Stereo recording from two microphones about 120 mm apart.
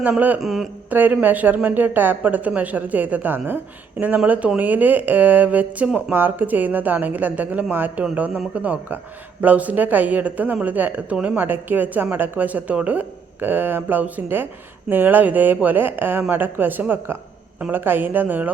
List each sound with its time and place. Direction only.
0.0 s speech: 15° right (ahead or behind)
0.4 s speech: centre (ahead or behind)
0.9 s speech: 15° right (ahead or behind)